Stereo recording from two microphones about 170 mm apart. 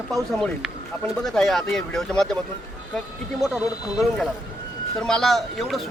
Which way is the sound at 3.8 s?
Centre (ahead or behind).